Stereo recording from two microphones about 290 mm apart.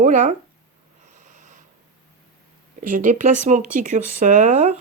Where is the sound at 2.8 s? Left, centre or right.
Right.